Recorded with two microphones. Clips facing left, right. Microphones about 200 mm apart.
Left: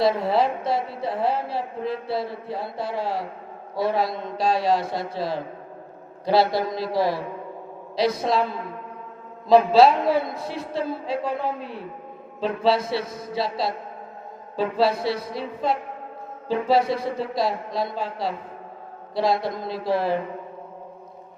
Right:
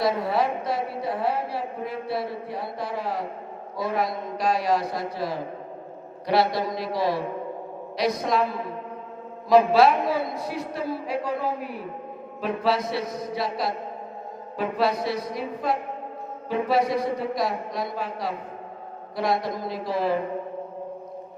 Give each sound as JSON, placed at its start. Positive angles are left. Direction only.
{"t": 0.0, "sound": "a woman's voice", "side_deg": 25}
{"t": 6.9, "sound": "a man's voice", "side_deg": 0}
{"t": 7.9, "sound": "a woman's voice", "side_deg": 30}
{"t": 9.7, "sound": "a woman's voice", "side_deg": 25}